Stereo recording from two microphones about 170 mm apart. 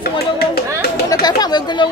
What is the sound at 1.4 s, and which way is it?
Speech, 25° left (ahead or behind).